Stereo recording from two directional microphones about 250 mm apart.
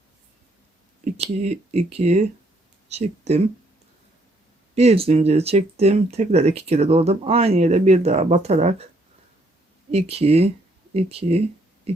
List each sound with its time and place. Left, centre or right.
1.0 s speech: right
4.7 s speech: right
9.9 s speech: right
11.9 s owl: right